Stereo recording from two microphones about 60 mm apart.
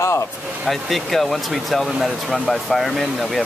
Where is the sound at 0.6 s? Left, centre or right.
Centre.